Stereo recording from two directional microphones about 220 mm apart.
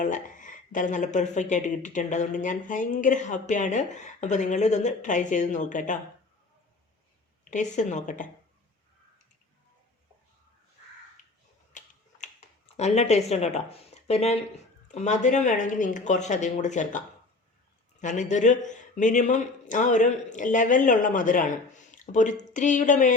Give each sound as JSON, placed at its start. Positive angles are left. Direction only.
{"t": 0.0, "sound": "speech", "side_deg": 35}
{"t": 7.5, "sound": "speech", "side_deg": 35}
{"t": 11.7, "sound": "speech", "side_deg": 35}
{"t": 18.0, "sound": "speech", "side_deg": 35}